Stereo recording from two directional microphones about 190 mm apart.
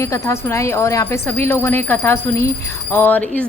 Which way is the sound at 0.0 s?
15° left (ahead or behind).